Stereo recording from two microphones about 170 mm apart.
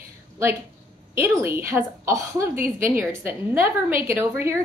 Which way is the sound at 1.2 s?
15° right (ahead or behind).